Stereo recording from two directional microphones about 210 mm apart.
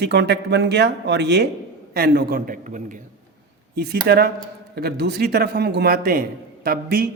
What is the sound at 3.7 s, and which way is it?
A man's voice, 50° right (ahead or behind).